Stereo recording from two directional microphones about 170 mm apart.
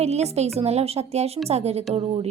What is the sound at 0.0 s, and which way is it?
A woman's voice, 40° right (ahead or behind).